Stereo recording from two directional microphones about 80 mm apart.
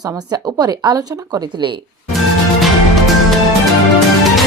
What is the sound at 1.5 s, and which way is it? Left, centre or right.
Speech, right.